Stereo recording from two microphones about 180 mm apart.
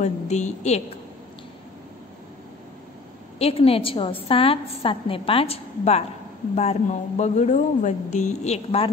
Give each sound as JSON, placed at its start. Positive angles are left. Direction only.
{"t": 0.0, "sound": "a woman's voice", "side_deg": 40}
{"t": 3.3, "sound": "a woman's voice", "side_deg": 35}